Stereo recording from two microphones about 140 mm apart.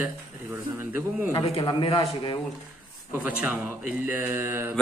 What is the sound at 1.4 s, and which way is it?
Speech, 40° left (ahead or behind).